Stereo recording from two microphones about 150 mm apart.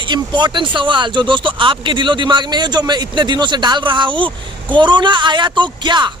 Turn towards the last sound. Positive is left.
turn(degrees=-30)  # may be behind; listen again after turning